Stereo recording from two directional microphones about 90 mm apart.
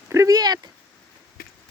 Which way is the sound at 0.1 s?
40° right (ahead or behind).